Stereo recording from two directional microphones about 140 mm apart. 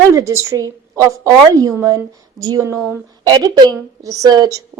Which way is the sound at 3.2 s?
30° right (ahead or behind).